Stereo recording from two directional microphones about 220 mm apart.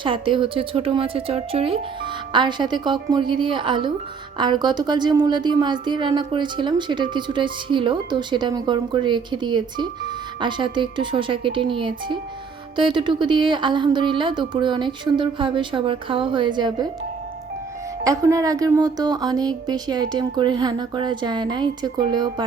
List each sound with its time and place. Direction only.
0.0 s a woman's voice: 20° right (ahead or behind)
18.0 s a woman's voice: 15° right (ahead or behind)